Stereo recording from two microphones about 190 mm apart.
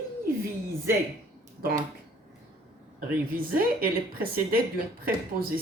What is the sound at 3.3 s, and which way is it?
A woman's voice, 50° right (ahead or behind).